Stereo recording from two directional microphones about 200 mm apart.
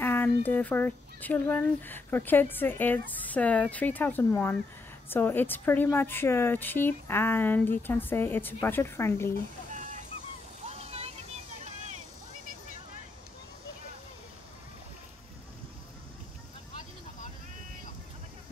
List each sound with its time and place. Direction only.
0.0 s a sound: 10° left (ahead or behind)
0.4 s speech: 10° left (ahead or behind)
9.7 s fowl: 40° right (ahead or behind)
10.7 s vehicle: 30° right (ahead or behind)